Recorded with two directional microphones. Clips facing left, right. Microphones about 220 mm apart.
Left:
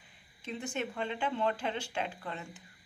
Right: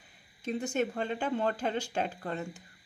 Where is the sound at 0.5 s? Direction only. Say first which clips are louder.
Right 6 dB; 40° right (ahead or behind).